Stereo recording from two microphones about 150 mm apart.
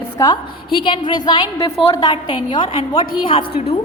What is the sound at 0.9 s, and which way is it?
A woman's voice, 30° left (ahead or behind).